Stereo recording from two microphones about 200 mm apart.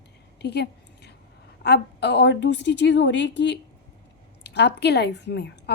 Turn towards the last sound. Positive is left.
turn(degrees=60)  # may be behind; listen again after turning